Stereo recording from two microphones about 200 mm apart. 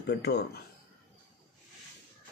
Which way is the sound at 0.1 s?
55° left (ahead or behind).